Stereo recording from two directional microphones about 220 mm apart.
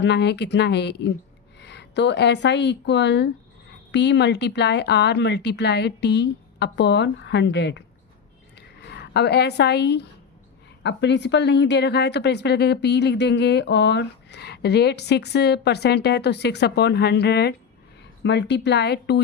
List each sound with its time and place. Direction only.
0.0 s a woman's voice: 50° left (ahead or behind)
8.5 s a sound: 50° left (ahead or behind)
10.8 s a woman's voice: 50° left (ahead or behind)